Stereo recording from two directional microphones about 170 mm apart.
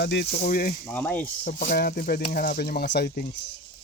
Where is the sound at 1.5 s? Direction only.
60° left (ahead or behind); by 3.1 s 80° left.